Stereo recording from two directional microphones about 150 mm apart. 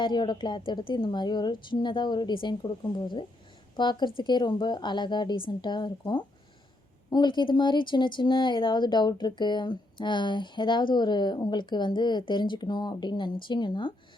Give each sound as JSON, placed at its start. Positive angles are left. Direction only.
{"t": 0.0, "sound": "speech", "side_deg": 30}